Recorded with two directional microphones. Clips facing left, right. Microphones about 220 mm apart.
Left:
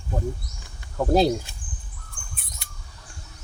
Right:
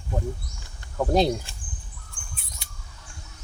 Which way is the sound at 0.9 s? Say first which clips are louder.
Left 2 dB; 5° left (ahead or behind).